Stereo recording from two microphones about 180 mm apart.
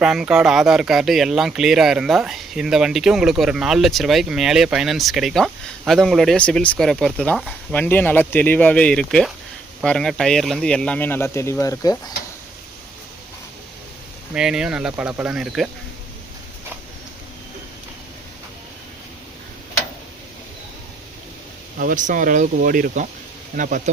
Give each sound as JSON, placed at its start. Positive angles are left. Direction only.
{"t": 0.0, "sound": "speech", "side_deg": -5}
{"t": 14.3, "sound": "speech", "side_deg": -5}
{"t": 21.8, "sound": "speech", "side_deg": -50}